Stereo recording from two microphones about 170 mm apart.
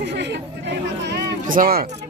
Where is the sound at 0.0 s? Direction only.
90° right.